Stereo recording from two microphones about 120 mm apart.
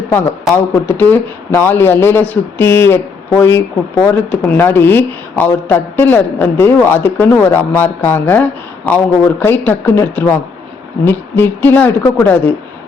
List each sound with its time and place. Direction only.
0.1 s speech: 15° left (ahead or behind)